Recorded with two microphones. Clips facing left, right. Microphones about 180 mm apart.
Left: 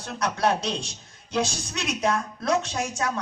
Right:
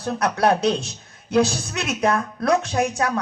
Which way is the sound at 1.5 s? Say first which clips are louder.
Right 4 dB; 60° right (ahead or behind).